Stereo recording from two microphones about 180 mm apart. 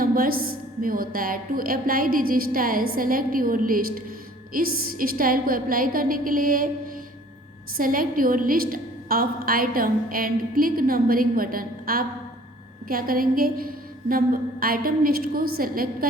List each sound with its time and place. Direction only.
0.0 s a woman's voice: 55° right (ahead or behind)